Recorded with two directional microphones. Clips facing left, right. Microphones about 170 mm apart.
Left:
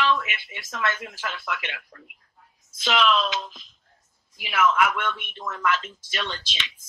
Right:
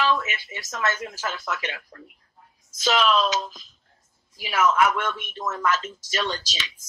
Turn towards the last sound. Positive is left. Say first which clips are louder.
# right 1 dB
turn(degrees=-40)  # may be behind; listen again after turning